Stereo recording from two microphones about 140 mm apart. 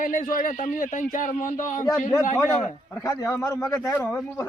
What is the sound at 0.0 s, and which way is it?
Speech, 70° left (ahead or behind).